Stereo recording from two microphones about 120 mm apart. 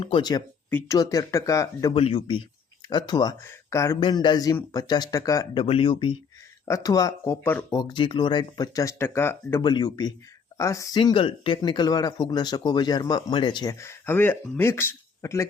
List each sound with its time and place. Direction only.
0.0 s speech: 50° left (ahead or behind)
0.9 s speech: 30° left (ahead or behind)
1.9 s speech: 55° left (ahead or behind)
2.9 s speech: 35° left (ahead or behind)
3.4 s speech: 25° left (ahead or behind)
4.0 s speech: 40° left (ahead or behind)
5.5 s speech: 50° left (ahead or behind)
6.7 s speech: 30° left (ahead or behind)
7.4 s speech: 20° left (ahead or behind)
7.8 s speech: 40° left (ahead or behind); by 9.6 s 20° left (ahead or behind)
9.6 s speech: 40° left (ahead or behind)
10.6 s speech: 25° left (ahead or behind)
11.0 s speech: 45° left (ahead or behind)
13.7 s speech: 20° left (ahead or behind)